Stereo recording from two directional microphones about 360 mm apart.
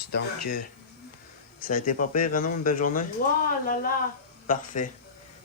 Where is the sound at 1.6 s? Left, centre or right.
Left.